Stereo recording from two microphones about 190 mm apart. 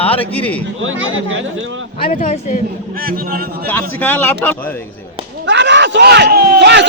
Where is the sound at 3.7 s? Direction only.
10° left (ahead or behind).